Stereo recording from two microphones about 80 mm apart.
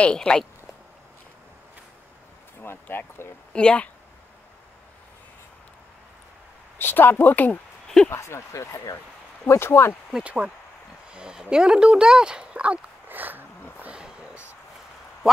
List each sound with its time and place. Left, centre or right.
0.0 s speech: centre
2.6 s speech: left
3.5 s speech: centre
6.8 s speech: left
8.1 s speech: left
10.1 s speech: centre
11.1 s a sound: centre
11.5 s speech: centre